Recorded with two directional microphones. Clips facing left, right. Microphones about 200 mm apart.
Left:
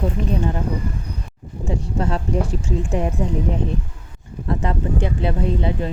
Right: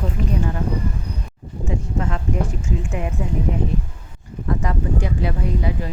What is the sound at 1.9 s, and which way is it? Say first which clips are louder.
Speech: left 3 dB; 35° left (ahead or behind).